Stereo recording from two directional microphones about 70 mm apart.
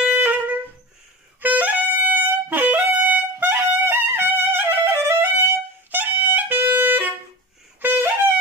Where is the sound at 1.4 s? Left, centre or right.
Right.